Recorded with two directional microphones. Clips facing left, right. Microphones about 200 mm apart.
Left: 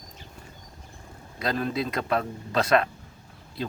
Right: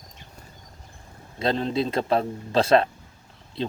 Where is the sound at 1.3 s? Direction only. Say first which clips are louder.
Right 3 dB; 25° right (ahead or behind).